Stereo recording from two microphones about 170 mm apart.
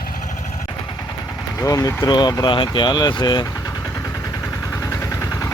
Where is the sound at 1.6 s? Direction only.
20° left (ahead or behind).